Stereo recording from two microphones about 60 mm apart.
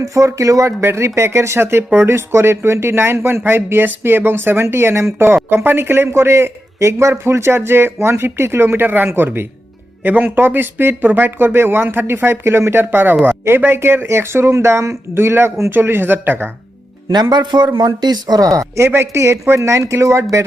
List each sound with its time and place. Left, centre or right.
0.0 s speech: right
0.8 s speech: right
15.7 s speech: right
17.5 s speech: right
18.3 s speech: right
19.1 s speech: right